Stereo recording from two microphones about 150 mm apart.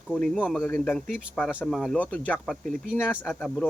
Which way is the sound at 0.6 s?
10° left (ahead or behind).